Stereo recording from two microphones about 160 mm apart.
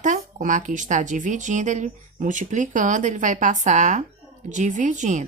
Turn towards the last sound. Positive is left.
turn(degrees=-50)  # may be behind; listen again after turning